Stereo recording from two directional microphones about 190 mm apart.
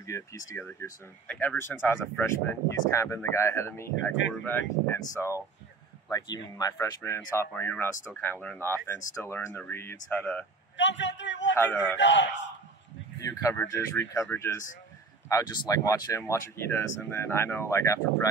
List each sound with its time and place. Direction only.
0.0 s speech: 15° left (ahead or behind)
10.8 s a man's voice: 70° left (ahead or behind)
11.5 s speech: 10° left (ahead or behind)
12.0 s a man's voice: 70° left (ahead or behind)
13.2 s speech: 15° left (ahead or behind)